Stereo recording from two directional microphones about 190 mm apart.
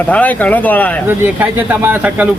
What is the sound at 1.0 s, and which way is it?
Speech, 10° right (ahead or behind).